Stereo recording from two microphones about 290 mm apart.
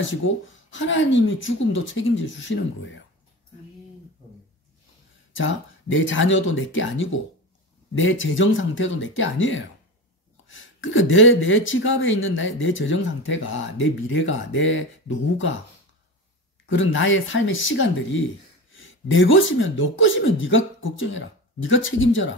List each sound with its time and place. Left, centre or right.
0.7 s speech: left
5.3 s speech: left
16.6 s speech: left